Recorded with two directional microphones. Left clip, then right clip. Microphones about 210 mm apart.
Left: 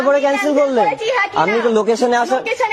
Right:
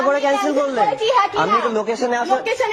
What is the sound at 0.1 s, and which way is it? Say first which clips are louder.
Speech: left 3 dB; 50° left (ahead or behind).